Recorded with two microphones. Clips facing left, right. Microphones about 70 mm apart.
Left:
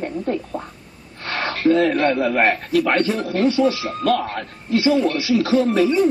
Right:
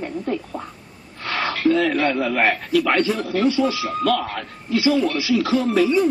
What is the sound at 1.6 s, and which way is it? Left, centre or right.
Speech, left.